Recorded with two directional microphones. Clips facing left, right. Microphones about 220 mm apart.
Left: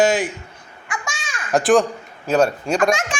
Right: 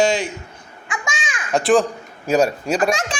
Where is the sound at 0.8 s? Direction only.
20° right (ahead or behind).